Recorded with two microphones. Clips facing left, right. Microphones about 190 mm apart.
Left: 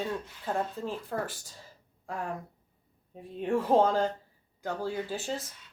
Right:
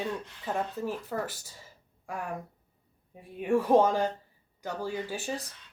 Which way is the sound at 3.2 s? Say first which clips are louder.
Right 2 dB; 10° right (ahead or behind).